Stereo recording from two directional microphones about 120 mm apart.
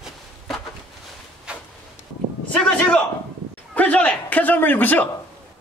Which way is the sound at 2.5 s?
10° left (ahead or behind).